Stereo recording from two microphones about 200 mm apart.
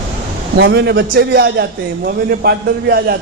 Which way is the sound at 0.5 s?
55° right (ahead or behind).